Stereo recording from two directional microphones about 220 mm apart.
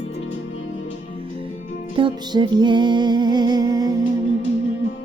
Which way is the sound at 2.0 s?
20° right (ahead or behind).